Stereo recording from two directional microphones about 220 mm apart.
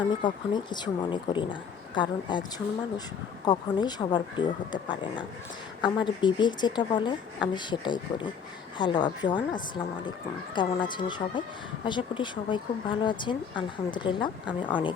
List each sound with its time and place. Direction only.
0.2 s speech: 20° left (ahead or behind)
3.4 s speech: 20° left (ahead or behind)